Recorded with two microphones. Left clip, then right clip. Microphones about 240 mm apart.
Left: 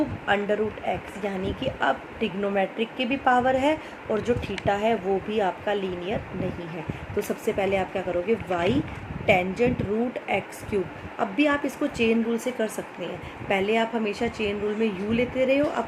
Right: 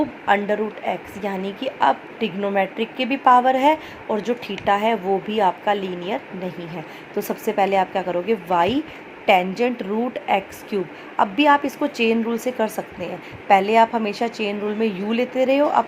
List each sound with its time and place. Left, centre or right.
0.3 s a woman's voice: centre
7.2 s a woman's voice: centre